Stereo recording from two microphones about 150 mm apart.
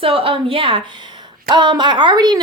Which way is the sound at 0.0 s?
35° right (ahead or behind).